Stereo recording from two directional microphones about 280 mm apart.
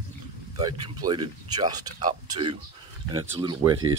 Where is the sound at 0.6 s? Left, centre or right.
Centre.